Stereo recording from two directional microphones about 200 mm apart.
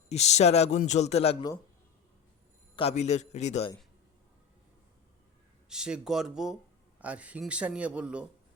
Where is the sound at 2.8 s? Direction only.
30° left (ahead or behind).